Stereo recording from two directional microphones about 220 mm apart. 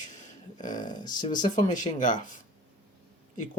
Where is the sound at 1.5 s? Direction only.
35° left (ahead or behind).